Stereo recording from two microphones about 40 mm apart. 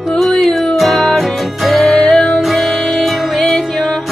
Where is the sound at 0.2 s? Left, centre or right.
Centre.